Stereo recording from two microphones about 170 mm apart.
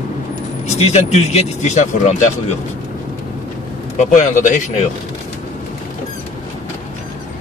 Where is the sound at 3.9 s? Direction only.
45° left (ahead or behind).